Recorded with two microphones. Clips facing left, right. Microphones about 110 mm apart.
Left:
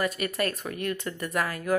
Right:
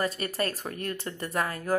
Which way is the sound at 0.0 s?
30° right (ahead or behind).